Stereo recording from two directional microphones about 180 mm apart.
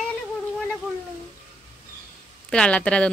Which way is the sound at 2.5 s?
5° left (ahead or behind).